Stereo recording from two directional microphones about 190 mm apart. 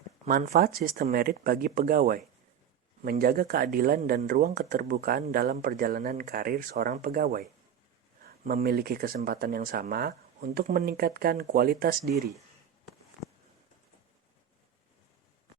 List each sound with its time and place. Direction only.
0.3 s speech: 45° right (ahead or behind)
4.2 s speech: 35° right (ahead or behind)
4.4 s speech: 50° right (ahead or behind)
8.6 s speech: 55° right (ahead or behind)